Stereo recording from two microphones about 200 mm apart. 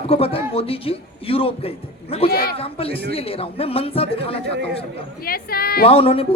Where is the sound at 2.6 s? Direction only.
30° left (ahead or behind).